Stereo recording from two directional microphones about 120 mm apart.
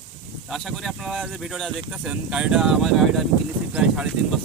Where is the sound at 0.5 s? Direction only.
Centre (ahead or behind).